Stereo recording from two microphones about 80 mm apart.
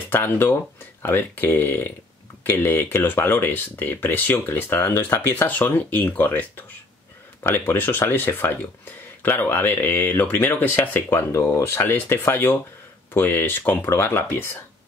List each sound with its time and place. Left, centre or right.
0.1 s speech: left